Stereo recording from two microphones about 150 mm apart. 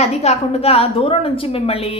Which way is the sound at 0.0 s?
45° left (ahead or behind).